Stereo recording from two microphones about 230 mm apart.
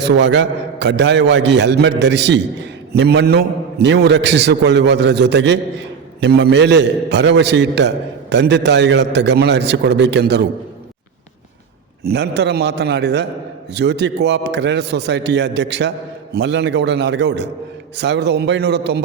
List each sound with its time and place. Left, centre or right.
0.0 s a man's voice: right
12.0 s a man's voice: right